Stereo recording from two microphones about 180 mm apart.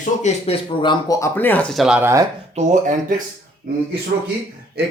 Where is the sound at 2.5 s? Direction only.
40° right (ahead or behind).